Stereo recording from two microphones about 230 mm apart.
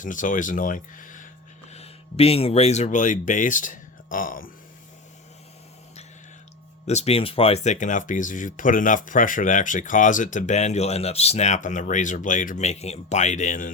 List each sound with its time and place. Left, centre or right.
0.0 s speech: left
6.8 s speech: left